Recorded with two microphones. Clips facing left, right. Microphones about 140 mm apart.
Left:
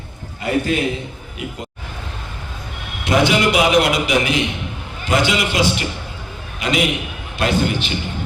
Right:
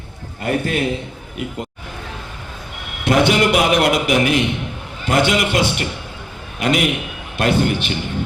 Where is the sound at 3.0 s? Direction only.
55° right (ahead or behind).